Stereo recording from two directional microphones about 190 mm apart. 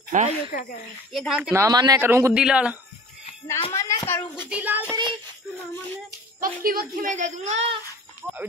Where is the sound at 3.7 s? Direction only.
15° left (ahead or behind).